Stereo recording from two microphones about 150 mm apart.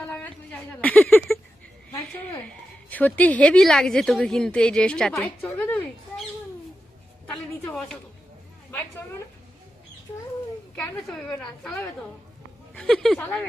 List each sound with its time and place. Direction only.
0.1 s a sound: 10° left (ahead or behind)
2.9 s speech: 10° left (ahead or behind)
7.7 s a woman's voice: 5° left (ahead or behind)
10.8 s speech: 5° left (ahead or behind)